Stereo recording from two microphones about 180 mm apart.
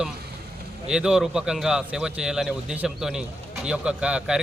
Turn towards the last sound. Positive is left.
turn(degrees=-5)  # may be behind; listen again after turning